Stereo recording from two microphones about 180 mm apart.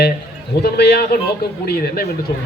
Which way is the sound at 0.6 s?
65° left (ahead or behind).